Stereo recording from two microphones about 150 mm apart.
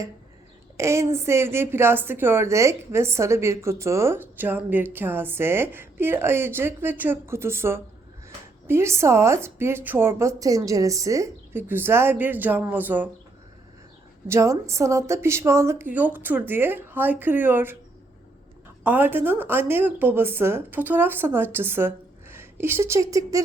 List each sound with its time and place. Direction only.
0.8 s a woman's voice: 20° right (ahead or behind)
14.3 s a woman's voice: 20° right (ahead or behind)
18.8 s a woman's voice: 10° right (ahead or behind)